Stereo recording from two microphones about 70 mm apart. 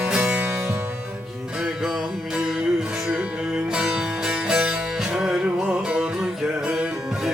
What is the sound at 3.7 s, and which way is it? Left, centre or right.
Music, centre.